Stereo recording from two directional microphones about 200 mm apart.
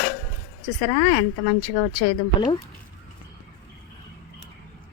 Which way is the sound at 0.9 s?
30° left (ahead or behind).